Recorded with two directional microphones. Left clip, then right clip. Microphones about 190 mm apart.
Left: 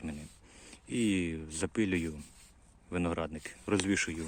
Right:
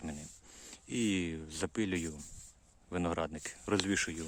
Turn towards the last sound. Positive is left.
turn(degrees=-10)  # may be behind; listen again after turning